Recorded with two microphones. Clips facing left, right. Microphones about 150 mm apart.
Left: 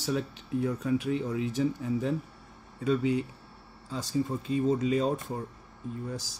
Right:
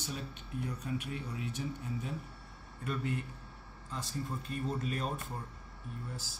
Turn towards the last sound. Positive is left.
turn(degrees=90)